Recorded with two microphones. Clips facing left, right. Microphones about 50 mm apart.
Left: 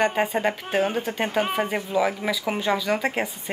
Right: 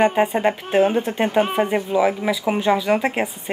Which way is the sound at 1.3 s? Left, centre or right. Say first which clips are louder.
Right 5 dB; centre.